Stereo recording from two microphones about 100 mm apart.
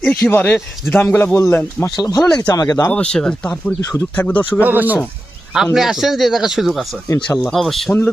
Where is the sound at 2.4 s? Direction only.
35° left (ahead or behind).